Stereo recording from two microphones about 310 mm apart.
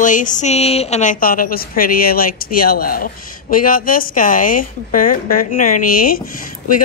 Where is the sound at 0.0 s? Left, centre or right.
Left.